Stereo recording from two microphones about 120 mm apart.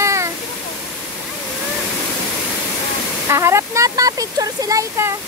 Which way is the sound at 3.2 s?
25° right (ahead or behind).